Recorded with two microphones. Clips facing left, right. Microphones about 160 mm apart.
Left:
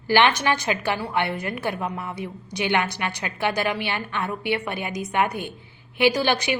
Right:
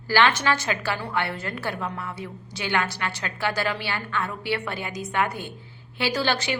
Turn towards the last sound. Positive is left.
turn(degrees=15)  # may be behind; listen again after turning